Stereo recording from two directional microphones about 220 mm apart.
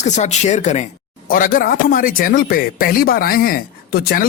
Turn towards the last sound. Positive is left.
turn(degrees=45)  # may be behind; listen again after turning